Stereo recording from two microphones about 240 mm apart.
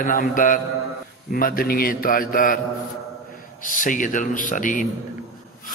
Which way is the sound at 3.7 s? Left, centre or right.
Left.